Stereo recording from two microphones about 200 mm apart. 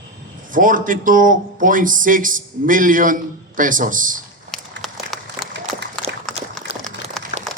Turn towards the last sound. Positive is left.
turn(degrees=0)  # may be behind; listen again after turning